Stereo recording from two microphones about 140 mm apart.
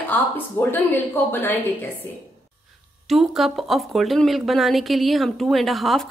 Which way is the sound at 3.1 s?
Centre (ahead or behind).